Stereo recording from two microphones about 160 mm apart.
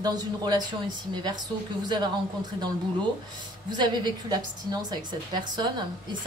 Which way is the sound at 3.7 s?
25° right (ahead or behind).